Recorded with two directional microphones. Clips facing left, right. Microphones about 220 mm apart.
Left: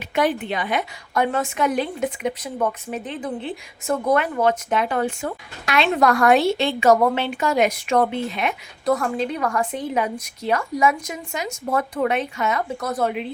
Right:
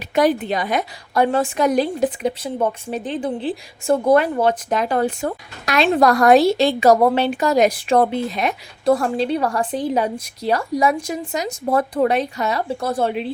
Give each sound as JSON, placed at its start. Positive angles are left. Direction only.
{"t": 0.1, "sound": "a woman's voice", "side_deg": -40}